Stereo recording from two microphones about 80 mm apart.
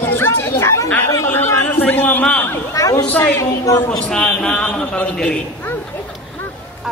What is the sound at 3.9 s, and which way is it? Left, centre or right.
A man's voice, centre.